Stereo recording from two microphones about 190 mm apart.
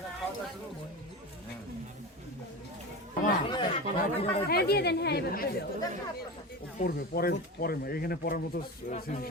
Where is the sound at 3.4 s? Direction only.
25° left (ahead or behind).